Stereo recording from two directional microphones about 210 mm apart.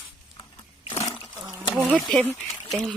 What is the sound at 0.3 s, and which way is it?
Wild animals, 20° left (ahead or behind).